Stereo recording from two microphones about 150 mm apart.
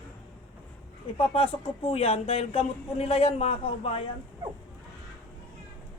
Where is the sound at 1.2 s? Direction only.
40° left (ahead or behind).